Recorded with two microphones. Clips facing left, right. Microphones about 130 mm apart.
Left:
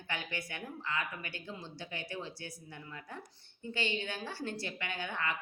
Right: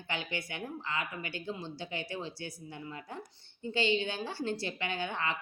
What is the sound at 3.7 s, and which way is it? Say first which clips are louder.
Speech: right 6 dB; 25° right (ahead or behind).